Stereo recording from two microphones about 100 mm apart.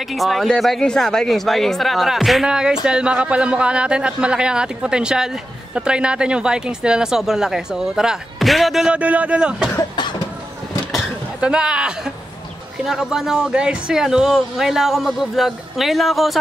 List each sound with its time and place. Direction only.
0.1 s speech: centre (ahead or behind)
9.9 s cough: 50° left (ahead or behind)
11.4 s speech: 10° right (ahead or behind)